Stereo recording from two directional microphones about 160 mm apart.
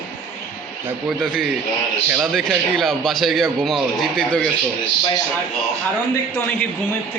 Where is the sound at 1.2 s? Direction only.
Centre (ahead or behind).